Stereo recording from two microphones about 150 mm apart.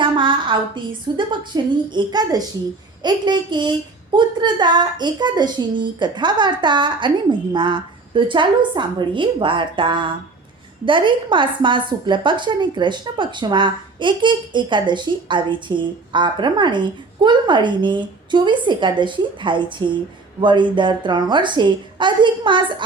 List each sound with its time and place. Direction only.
0.0 s a woman's voice: 30° right (ahead or behind)